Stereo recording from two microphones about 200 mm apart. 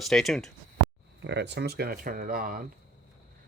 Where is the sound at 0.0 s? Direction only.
Centre (ahead or behind).